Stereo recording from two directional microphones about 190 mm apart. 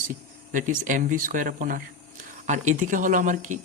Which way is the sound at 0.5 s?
45° right (ahead or behind).